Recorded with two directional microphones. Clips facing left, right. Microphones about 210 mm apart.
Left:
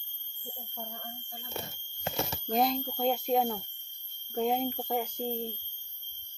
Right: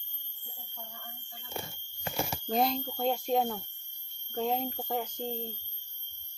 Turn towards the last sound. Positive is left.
turn(degrees=10)  # may be behind; listen again after turning